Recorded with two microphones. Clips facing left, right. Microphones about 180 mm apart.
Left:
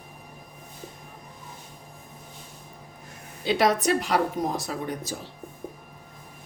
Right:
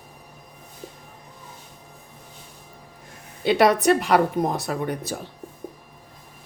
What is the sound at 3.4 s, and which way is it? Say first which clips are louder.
Speech: right 5 dB; 60° right (ahead or behind).